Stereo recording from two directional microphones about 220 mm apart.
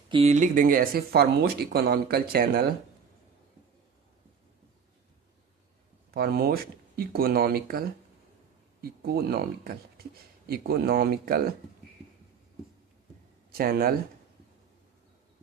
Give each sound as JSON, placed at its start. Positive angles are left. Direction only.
{"t": 0.1, "sound": "speech", "side_deg": -30}
{"t": 6.1, "sound": "speech", "side_deg": -45}
{"t": 13.5, "sound": "speech", "side_deg": -45}